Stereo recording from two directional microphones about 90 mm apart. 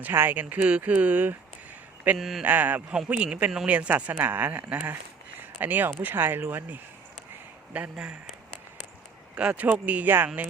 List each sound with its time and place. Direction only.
0.0 s speech: 20° right (ahead or behind)
2.1 s speech: centre (ahead or behind)
2.4 s speech: 20° right (ahead or behind)